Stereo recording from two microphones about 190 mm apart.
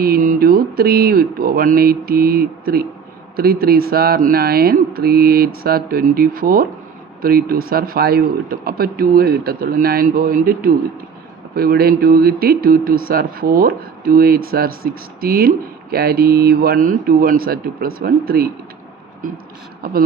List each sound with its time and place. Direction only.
0.0 s speech: 50° right (ahead or behind)